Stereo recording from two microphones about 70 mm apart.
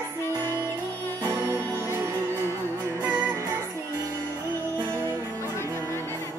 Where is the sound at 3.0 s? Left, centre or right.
Right.